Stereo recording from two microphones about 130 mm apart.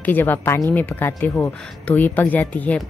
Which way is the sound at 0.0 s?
15° left (ahead or behind).